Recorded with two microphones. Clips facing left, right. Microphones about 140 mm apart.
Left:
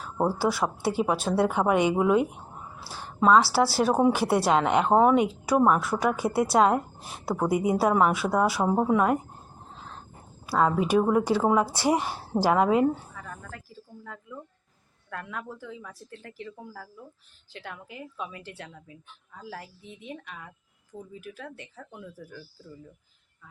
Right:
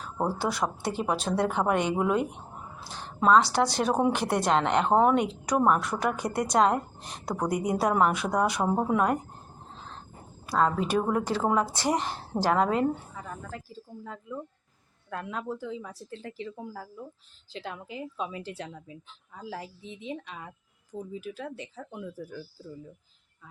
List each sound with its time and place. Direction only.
0.0 s a woman's voice: 5° left (ahead or behind)
10.4 s a woman's voice: 5° left (ahead or behind)
13.2 s speech: 20° right (ahead or behind)
19.8 s a woman's voice: 90° right
20.1 s speech: 20° right (ahead or behind)